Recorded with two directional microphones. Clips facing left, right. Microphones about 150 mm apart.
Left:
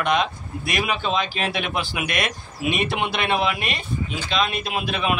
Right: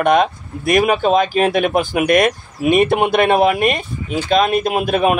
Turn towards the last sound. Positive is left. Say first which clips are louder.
# right 9 dB
turn(degrees=-45)  # may be behind; listen again after turning